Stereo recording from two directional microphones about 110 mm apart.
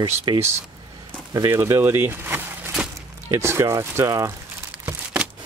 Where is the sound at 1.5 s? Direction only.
25° right (ahead or behind).